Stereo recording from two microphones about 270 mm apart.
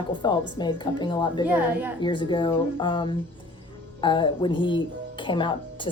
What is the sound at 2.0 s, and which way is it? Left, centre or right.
Speech, centre.